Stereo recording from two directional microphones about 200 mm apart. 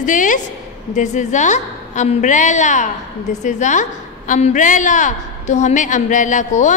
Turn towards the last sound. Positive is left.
turn(degrees=40)  # may be behind; listen again after turning